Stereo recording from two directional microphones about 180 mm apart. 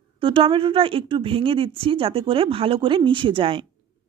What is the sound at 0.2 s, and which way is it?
Speech, 30° right (ahead or behind).